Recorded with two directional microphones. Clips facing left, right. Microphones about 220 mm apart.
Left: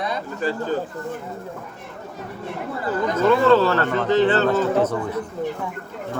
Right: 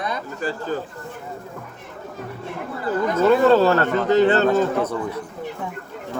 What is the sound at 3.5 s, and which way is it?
Speech, 45° right (ahead or behind).